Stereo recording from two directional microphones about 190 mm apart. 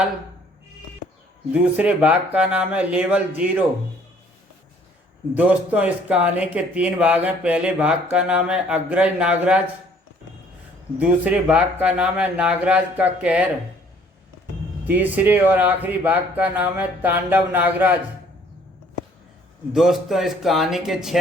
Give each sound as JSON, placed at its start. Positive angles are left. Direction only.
{"t": 1.7, "sound": "a man's voice", "side_deg": -10}
{"t": 5.3, "sound": "a man's voice", "side_deg": -10}
{"t": 10.9, "sound": "a man's voice", "side_deg": -10}
{"t": 14.8, "sound": "a man's voice", "side_deg": -10}
{"t": 19.7, "sound": "speech", "side_deg": 0}